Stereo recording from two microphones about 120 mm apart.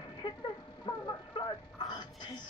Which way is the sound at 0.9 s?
45° left (ahead or behind).